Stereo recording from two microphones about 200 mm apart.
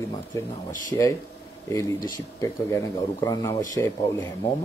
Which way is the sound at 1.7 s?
15° left (ahead or behind).